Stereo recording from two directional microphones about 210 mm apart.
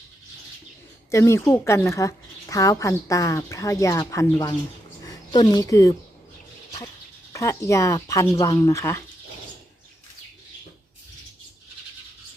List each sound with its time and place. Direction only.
1.1 s a woman's voice: 15° left (ahead or behind)
7.3 s a woman's voice: 15° left (ahead or behind)